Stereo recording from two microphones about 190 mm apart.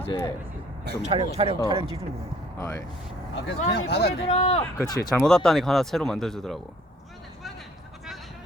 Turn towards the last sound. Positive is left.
turn(degrees=0)  # may be behind; listen again after turning